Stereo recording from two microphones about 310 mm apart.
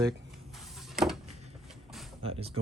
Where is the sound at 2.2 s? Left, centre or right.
Centre.